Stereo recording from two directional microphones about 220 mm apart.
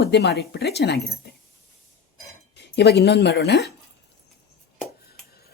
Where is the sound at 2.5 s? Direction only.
50° left (ahead or behind).